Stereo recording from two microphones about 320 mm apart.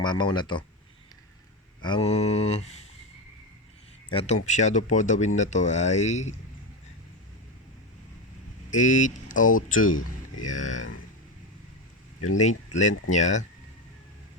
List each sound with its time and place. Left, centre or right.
0.0 s speech: centre
1.8 s speech: centre
4.1 s speech: centre
8.7 s speech: left
12.4 s speech: left